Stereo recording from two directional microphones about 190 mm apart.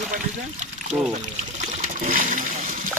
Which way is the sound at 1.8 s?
45° right (ahead or behind).